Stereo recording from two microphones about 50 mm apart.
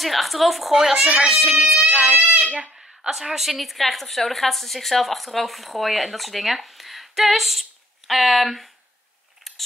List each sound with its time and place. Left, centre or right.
0.0 s a woman's voice: centre
1.0 s a child's voice: centre; by 2.5 s right
2.6 s a sound: centre
3.1 s a woman's voice: centre